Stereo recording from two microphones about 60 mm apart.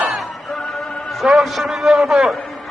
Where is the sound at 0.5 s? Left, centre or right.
Centre.